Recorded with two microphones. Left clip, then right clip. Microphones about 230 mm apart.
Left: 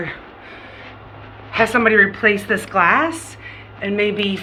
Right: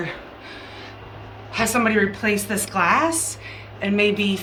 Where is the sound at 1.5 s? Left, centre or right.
Centre.